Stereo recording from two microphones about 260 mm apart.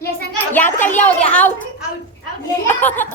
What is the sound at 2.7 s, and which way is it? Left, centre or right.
Speech, centre.